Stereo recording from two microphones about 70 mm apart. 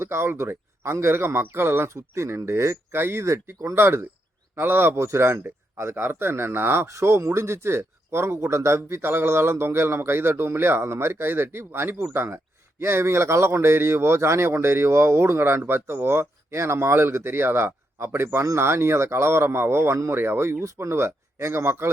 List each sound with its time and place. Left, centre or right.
0.0 s speech: right